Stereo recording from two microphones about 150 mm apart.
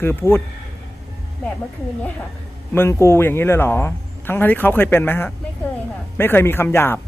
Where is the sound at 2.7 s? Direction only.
15° left (ahead or behind).